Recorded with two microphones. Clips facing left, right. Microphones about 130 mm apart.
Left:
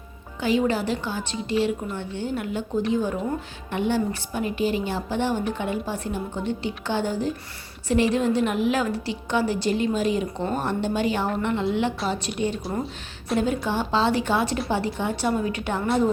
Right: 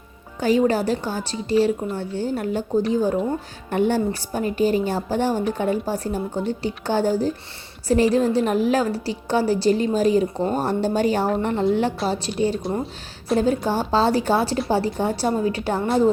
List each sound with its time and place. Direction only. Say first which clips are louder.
0.3 s a woman's voice: right 4 dB; 40° right (ahead or behind)
12.7 s speech: right 2 dB; centre (ahead or behind)
13.4 s a woman's voice: right 3 dB; 40° right (ahead or behind)